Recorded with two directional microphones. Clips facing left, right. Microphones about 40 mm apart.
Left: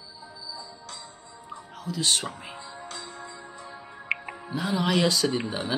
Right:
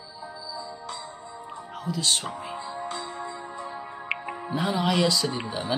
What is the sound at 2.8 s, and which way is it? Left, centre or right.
Music, right.